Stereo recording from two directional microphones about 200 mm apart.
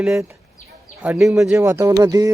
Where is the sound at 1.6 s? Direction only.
15° right (ahead or behind).